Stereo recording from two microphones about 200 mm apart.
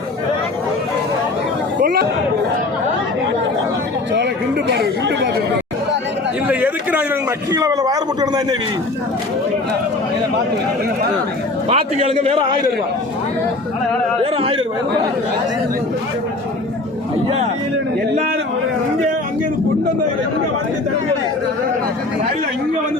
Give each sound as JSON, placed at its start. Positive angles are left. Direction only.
{"t": 1.8, "sound": "chatter", "side_deg": -50}
{"t": 4.7, "sound": "chatter", "side_deg": -60}
{"t": 6.5, "sound": "a sound", "side_deg": -10}
{"t": 11.7, "sound": "a man's voice", "side_deg": -30}
{"t": 14.3, "sound": "speech", "side_deg": -25}